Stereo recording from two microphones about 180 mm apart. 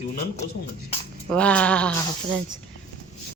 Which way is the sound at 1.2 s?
5° left (ahead or behind).